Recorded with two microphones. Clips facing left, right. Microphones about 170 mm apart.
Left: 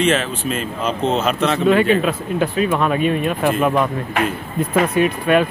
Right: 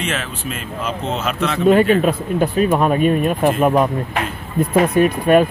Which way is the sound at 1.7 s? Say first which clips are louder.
Right 3 dB; 40° right (ahead or behind).